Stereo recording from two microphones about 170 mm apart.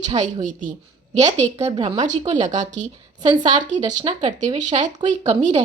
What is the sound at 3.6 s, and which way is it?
A woman's voice, 45° right (ahead or behind).